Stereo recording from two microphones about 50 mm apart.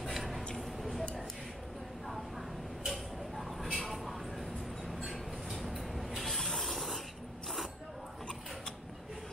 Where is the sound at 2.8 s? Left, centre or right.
Centre.